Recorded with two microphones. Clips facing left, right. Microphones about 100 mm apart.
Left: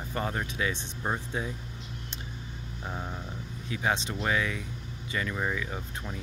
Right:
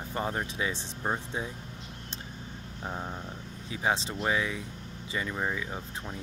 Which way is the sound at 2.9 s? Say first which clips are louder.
Right 1 dB; 15° right (ahead or behind).